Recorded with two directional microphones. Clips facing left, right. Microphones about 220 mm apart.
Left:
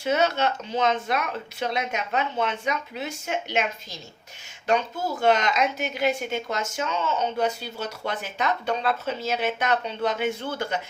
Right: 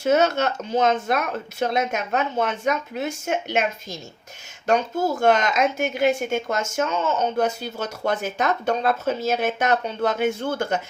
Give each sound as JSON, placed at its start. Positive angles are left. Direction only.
{"t": 0.0, "sound": "a woman's voice", "side_deg": -45}